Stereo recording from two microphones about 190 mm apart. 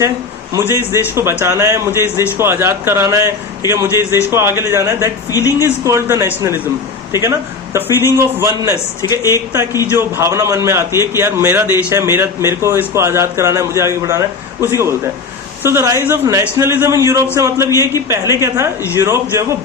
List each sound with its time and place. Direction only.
0.5 s a man's voice: 10° right (ahead or behind)
8.7 s a man's voice: 15° left (ahead or behind)
9.3 s a man's voice: 15° right (ahead or behind)